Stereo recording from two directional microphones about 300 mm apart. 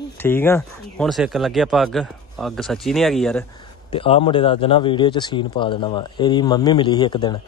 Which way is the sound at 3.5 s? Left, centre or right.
Centre.